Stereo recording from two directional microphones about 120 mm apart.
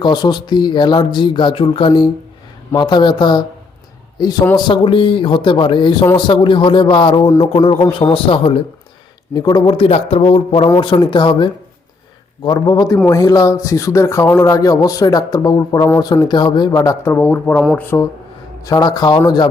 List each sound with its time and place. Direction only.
0.0 s speech: 40° left (ahead or behind)
9.3 s a man's voice: 35° left (ahead or behind); by 18.0 s 20° left (ahead or behind)
18.6 s speech: 30° left (ahead or behind)